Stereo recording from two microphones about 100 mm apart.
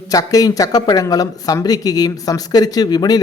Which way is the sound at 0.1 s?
35° left (ahead or behind).